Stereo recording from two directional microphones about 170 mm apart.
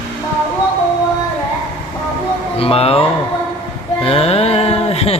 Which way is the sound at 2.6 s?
35° left (ahead or behind).